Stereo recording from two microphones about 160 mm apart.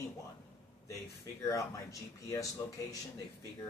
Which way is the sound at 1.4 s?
20° left (ahead or behind).